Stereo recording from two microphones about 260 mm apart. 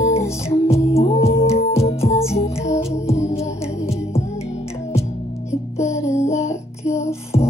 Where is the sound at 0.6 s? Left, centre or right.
Left.